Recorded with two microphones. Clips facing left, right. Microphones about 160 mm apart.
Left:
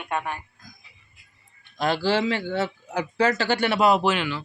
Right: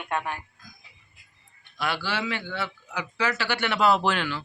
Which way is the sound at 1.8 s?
40° left (ahead or behind).